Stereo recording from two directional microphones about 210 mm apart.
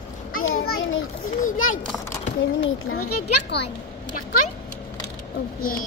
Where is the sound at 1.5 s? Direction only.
75° left (ahead or behind); by 3.4 s 90° left.